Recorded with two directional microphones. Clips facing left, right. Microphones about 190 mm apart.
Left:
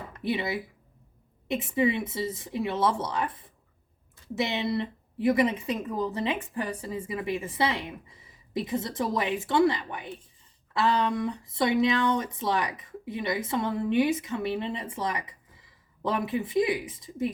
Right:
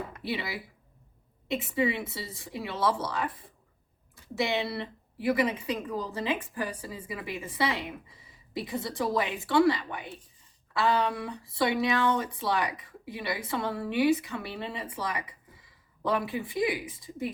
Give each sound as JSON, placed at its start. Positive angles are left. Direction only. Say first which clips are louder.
{"t": 0.2, "sound": "a woman's voice", "louder": "left 8 dB", "side_deg": 20}
{"t": 11.3, "sound": "a woman's voice", "louder": "left 2 dB", "side_deg": 20}